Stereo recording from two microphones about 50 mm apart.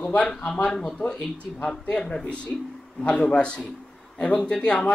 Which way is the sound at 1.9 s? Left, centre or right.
Centre.